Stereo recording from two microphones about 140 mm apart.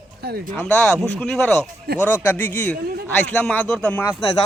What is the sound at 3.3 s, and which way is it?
Speech, 10° left (ahead or behind).